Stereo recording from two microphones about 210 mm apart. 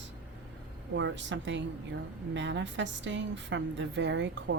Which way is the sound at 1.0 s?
60° right (ahead or behind).